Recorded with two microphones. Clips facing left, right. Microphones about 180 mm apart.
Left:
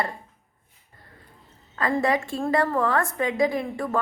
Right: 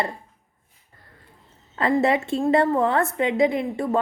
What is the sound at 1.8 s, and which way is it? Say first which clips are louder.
A woman's voice: right 3 dB; 25° right (ahead or behind).